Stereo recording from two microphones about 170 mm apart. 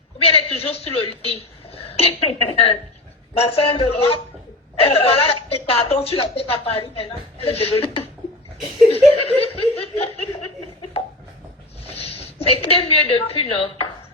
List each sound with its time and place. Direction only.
0.2 s a man's voice: 35° left (ahead or behind)
9.2 s speech: 35° left (ahead or behind)
11.9 s a woman's voice: 35° left (ahead or behind)